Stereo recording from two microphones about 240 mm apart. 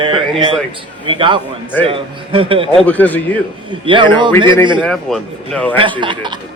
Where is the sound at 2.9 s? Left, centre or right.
Centre.